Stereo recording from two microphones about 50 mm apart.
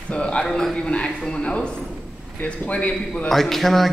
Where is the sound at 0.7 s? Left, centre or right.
Left.